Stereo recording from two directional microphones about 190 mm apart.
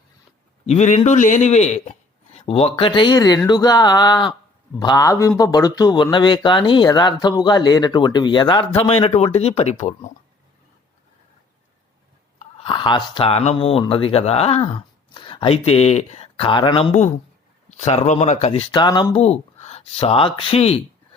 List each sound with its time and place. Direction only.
0.6 s a man's voice: 35° left (ahead or behind)
12.4 s a man's voice: 30° left (ahead or behind)